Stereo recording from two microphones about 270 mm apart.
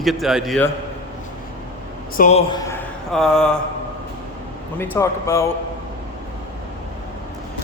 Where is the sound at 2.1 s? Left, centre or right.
Left.